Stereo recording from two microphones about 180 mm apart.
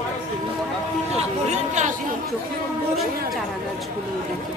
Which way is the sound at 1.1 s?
40° right (ahead or behind).